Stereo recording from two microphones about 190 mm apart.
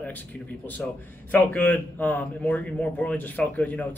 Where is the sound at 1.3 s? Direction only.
10° left (ahead or behind).